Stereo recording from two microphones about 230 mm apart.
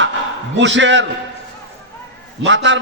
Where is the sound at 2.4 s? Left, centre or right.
Right.